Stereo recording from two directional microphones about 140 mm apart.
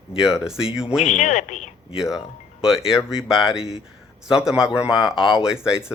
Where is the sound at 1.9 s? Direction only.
5° right (ahead or behind).